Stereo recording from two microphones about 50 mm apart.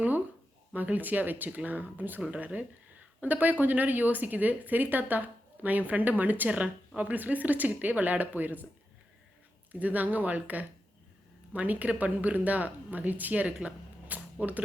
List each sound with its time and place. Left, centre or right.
0.7 s speech: right
6.5 s speech: right
9.7 s speech: right